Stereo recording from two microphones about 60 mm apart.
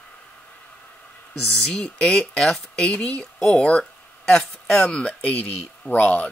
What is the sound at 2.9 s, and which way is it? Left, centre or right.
Speech, centre.